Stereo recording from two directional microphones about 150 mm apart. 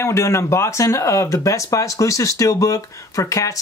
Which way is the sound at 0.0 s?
20° left (ahead or behind).